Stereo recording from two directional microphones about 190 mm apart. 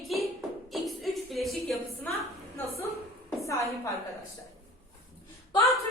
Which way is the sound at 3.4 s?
15° left (ahead or behind).